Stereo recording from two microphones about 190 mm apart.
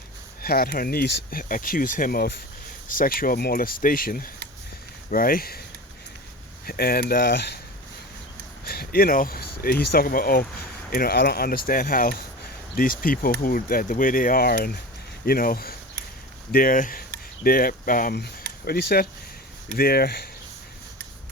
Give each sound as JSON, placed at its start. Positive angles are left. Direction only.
{"t": 0.4, "sound": "speech", "side_deg": 50}
{"t": 6.7, "sound": "speech", "side_deg": 55}
{"t": 8.6, "sound": "speech", "side_deg": 55}